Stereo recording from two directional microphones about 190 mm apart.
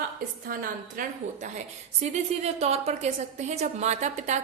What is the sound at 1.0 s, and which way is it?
Speech, 45° right (ahead or behind).